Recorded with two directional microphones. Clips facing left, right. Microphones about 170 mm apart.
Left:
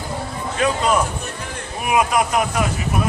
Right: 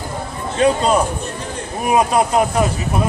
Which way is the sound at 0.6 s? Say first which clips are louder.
Right 4 dB; 30° right (ahead or behind).